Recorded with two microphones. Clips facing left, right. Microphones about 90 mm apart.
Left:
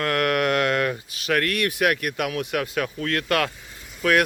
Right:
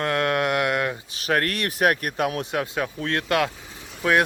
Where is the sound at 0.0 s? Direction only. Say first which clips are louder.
Left 1 dB; 25° right (ahead or behind).